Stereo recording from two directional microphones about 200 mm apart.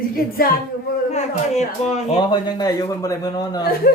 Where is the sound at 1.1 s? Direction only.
30° left (ahead or behind).